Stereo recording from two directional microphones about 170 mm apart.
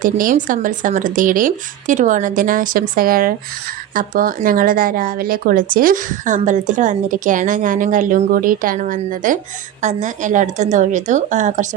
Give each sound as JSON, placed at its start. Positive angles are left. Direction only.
{"t": 0.0, "sound": "speech", "side_deg": -55}